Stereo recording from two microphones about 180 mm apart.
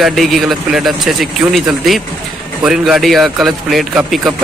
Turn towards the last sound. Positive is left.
turn(degrees=0)  # may be behind; listen again after turning